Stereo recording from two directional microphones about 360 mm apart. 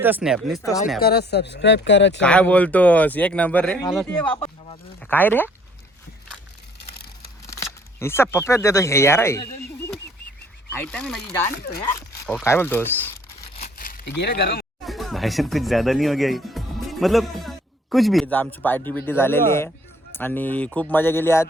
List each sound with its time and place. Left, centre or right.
0.0 s speech: centre
0.9 s speech: left
2.2 s speech: centre
4.4 s a sound: centre
4.9 s speech: centre
7.4 s speech: centre
10.8 s speech: centre
13.6 s a sound: left
14.8 s speech: centre